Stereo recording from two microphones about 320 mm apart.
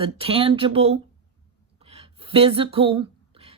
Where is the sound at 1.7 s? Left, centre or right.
Centre.